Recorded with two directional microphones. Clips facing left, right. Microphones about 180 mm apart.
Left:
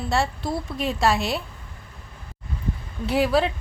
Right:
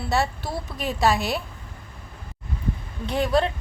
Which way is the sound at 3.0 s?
5° left (ahead or behind).